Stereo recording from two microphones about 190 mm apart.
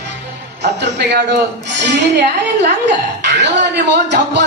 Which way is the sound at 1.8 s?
65° right (ahead or behind).